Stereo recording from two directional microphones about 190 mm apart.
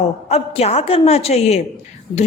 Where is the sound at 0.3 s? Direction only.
35° left (ahead or behind).